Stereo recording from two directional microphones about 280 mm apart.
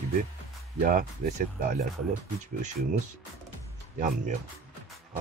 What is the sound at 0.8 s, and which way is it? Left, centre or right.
Speech, right.